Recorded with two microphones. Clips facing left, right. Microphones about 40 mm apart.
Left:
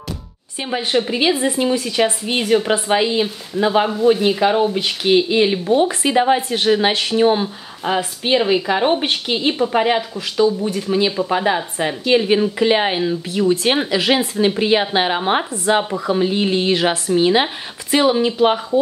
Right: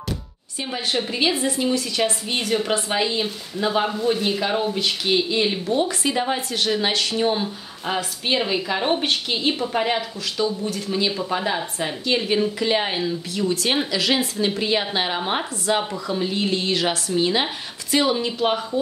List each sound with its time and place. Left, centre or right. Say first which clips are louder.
1.0 s speech: left 4 dB; centre